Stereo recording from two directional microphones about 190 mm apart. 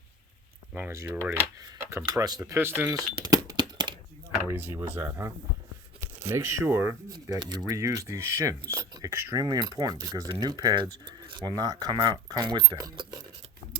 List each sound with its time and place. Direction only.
0.7 s speech: 10° right (ahead or behind)
3.2 s a sound: 20° right (ahead or behind)
4.4 s speech: 10° right (ahead or behind)